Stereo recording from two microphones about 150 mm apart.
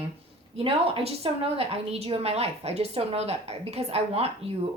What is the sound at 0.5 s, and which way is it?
A woman's voice, 40° right (ahead or behind).